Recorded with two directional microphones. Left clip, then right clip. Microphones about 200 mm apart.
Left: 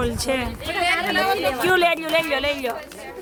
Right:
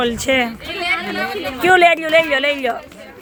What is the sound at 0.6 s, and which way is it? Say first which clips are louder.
Speech: even; 45° left (ahead or behind).